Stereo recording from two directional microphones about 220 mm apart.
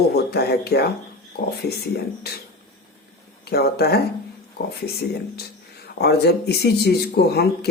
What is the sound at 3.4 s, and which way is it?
Speech, 45° left (ahead or behind).